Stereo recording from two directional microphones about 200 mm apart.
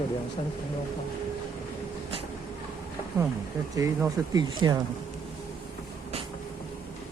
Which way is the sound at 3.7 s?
15° right (ahead or behind).